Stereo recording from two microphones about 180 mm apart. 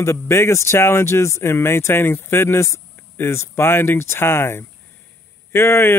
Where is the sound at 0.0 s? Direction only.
15° left (ahead or behind).